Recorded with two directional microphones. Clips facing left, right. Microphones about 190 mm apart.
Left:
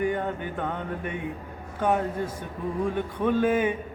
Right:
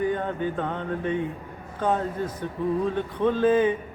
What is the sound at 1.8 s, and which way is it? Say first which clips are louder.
A man's voice: even; 10° left (ahead or behind).